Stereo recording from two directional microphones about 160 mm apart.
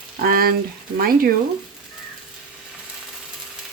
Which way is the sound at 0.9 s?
65° right (ahead or behind).